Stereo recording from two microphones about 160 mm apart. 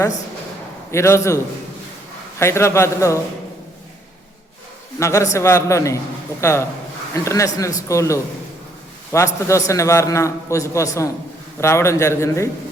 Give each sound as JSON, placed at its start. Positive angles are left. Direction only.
{"t": 0.9, "sound": "a man's voice", "side_deg": 15}
{"t": 2.4, "sound": "a man's voice", "side_deg": 15}
{"t": 4.9, "sound": "a man's voice", "side_deg": 20}